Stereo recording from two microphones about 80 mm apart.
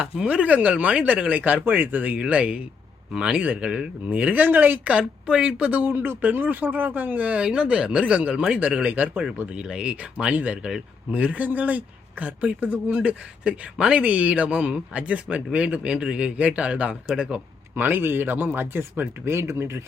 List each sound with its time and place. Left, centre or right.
0.0 s speech: centre
5.9 s a man's voice: right; by 17.4 s centre
17.7 s a man's voice: right